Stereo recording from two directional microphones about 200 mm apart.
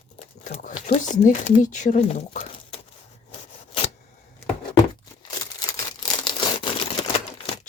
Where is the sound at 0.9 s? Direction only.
40° left (ahead or behind).